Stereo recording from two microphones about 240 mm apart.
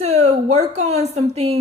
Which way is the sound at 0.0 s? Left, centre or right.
Right.